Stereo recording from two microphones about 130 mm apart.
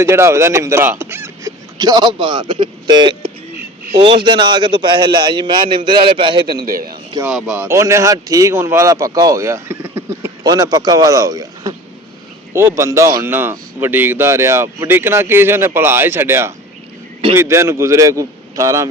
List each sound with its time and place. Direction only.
0.0 s speech: 20° right (ahead or behind)
1.8 s a man's voice: 35° right (ahead or behind)
7.3 s speech: 5° right (ahead or behind); by 18.9 s 25° right (ahead or behind)